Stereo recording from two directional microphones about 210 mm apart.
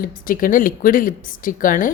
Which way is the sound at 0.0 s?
40° left (ahead or behind).